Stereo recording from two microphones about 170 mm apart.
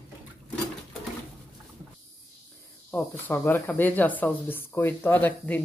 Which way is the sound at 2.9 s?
10° left (ahead or behind).